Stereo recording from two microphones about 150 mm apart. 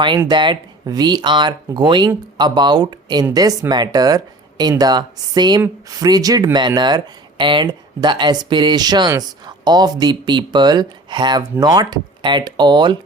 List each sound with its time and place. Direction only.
0.3 s speech: 30° right (ahead or behind)